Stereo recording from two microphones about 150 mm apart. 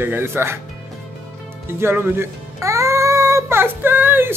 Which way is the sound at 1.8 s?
15° right (ahead or behind).